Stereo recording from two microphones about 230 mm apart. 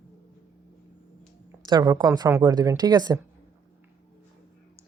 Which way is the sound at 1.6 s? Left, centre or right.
Centre.